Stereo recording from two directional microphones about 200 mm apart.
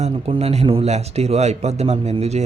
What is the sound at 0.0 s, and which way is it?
A man's voice, 30° right (ahead or behind).